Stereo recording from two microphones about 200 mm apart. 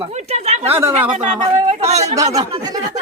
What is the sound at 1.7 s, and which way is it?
Speech, 35° right (ahead or behind).